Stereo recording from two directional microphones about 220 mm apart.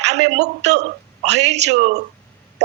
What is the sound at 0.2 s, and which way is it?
Speech, 55° right (ahead or behind).